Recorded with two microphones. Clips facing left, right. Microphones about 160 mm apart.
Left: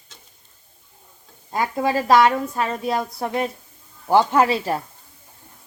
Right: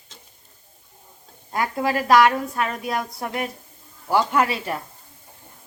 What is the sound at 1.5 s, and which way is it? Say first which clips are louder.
A woman's voice: left 2 dB; 20° left (ahead or behind).